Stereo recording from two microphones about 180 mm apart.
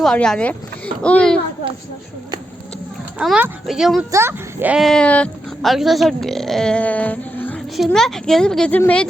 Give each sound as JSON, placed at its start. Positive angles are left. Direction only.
{"t": 0.0, "sound": "speech", "side_deg": 5}
{"t": 3.2, "sound": "speech", "side_deg": -5}
{"t": 4.1, "sound": "speech", "side_deg": -15}